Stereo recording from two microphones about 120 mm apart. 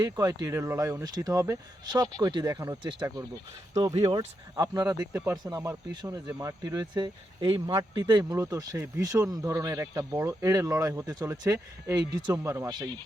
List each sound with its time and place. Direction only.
0.0 s speech: 30° right (ahead or behind)